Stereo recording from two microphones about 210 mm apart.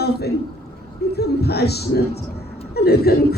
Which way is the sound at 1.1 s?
50° left (ahead or behind).